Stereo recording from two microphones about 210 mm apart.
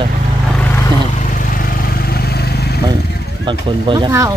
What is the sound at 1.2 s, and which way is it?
Vehicle, 40° left (ahead or behind).